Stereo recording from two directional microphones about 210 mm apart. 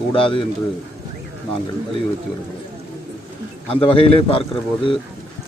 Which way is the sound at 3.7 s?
25° left (ahead or behind).